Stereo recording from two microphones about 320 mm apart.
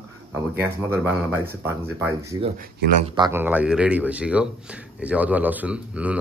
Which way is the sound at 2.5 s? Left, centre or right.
Right.